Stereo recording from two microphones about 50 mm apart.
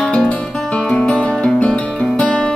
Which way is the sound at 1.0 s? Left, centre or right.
Left.